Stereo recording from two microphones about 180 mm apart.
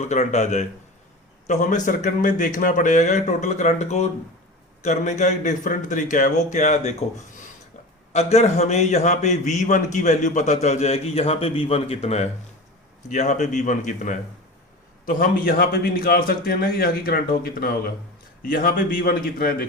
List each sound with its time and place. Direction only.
0.0 s a man's voice: 40° left (ahead or behind)
8.1 s a man's voice: 35° left (ahead or behind); by 19.6 s 55° left (ahead or behind)